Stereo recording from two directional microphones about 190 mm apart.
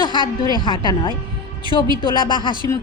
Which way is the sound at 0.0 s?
25° left (ahead or behind).